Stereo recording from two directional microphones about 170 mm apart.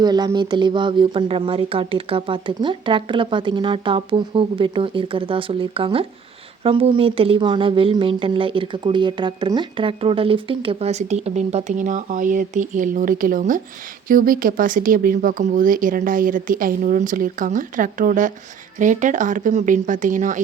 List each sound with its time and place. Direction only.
0.0 s speech: 25° right (ahead or behind); by 20.4 s 45° right (ahead or behind)